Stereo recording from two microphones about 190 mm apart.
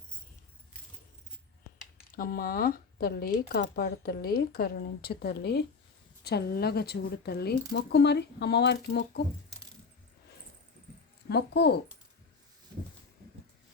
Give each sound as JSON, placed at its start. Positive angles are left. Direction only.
{"t": 2.1, "sound": "speech", "side_deg": 50}
{"t": 7.7, "sound": "speech", "side_deg": 70}
{"t": 11.3, "sound": "speech", "side_deg": 60}